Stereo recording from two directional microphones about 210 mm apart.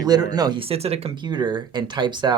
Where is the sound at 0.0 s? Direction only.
20° right (ahead or behind).